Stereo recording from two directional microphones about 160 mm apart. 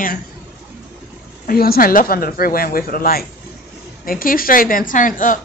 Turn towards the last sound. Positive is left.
turn(degrees=55)  # may be behind; listen again after turning